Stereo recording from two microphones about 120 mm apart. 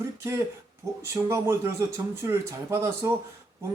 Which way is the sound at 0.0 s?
20° right (ahead or behind).